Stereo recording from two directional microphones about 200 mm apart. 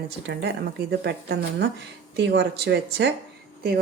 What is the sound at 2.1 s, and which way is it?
Speech, 55° right (ahead or behind).